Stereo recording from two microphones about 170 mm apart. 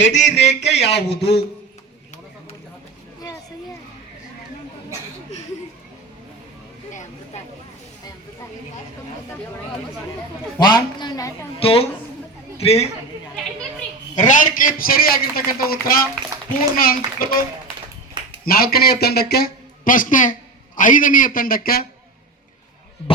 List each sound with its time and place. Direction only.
0.0 s speech: 45° left (ahead or behind)
10.7 s a woman's voice: 25° left (ahead or behind)
14.2 s a man's voice: 50° left (ahead or behind)
18.4 s a man's voice: 60° left (ahead or behind)